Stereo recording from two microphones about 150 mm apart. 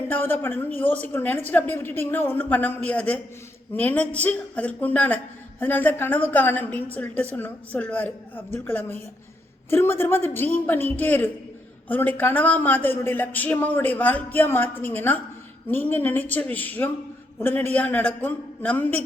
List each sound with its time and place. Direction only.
0.1 s speech: 15° left (ahead or behind)